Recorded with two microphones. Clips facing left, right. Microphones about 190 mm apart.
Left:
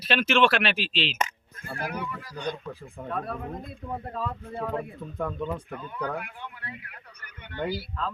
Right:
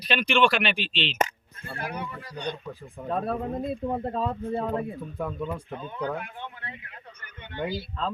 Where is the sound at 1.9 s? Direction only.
30° right (ahead or behind).